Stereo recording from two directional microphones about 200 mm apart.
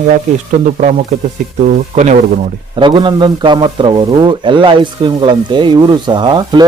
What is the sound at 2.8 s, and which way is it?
A man's voice, 25° right (ahead or behind).